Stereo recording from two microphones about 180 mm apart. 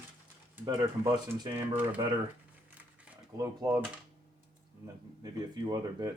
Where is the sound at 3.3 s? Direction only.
20° right (ahead or behind).